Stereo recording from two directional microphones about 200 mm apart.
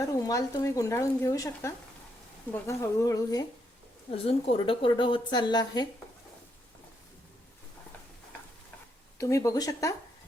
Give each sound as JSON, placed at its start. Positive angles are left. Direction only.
{"t": 0.1, "sound": "speech", "side_deg": 15}
{"t": 4.1, "sound": "a woman's voice", "side_deg": 30}
{"t": 9.1, "sound": "speech", "side_deg": 15}